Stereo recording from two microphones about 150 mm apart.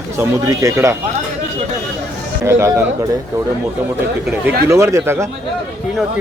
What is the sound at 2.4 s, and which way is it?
Speech, 20° right (ahead or behind).